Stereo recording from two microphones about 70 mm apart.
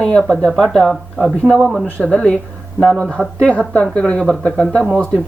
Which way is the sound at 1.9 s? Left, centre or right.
Centre.